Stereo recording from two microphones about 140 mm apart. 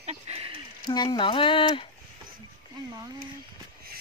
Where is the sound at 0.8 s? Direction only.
30° left (ahead or behind).